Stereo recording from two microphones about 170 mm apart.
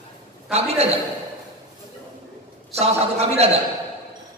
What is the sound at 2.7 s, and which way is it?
Speech, 40° right (ahead or behind).